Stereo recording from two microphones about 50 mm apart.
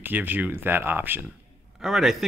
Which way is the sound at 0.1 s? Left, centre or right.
Right.